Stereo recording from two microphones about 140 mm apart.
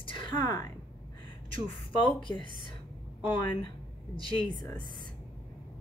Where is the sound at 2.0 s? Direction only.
35° left (ahead or behind).